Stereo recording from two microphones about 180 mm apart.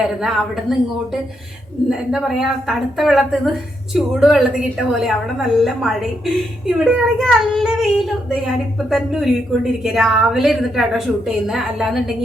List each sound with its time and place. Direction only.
0.0 s a woman's voice: centre (ahead or behind)